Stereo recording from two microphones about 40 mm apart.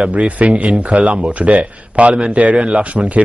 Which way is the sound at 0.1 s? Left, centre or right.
Right.